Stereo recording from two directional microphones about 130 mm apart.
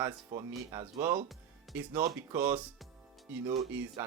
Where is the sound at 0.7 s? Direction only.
25° right (ahead or behind).